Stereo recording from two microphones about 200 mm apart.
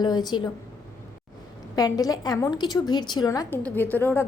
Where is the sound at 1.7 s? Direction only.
20° left (ahead or behind).